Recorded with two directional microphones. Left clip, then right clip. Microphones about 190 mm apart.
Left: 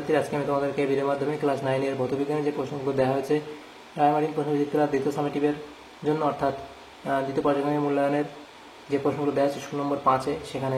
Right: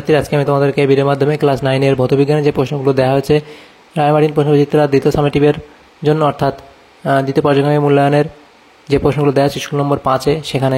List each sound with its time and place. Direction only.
0.1 s speech: 45° right (ahead or behind)
9.7 s speech: 40° right (ahead or behind)
10.0 s speech: 50° right (ahead or behind)